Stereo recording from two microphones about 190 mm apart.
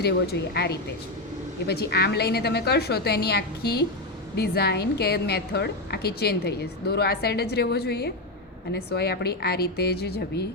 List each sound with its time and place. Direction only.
0.5 s a woman's voice: 60° left (ahead or behind)